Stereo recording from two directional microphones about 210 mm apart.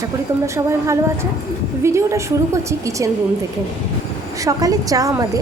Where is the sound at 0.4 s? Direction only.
15° right (ahead or behind).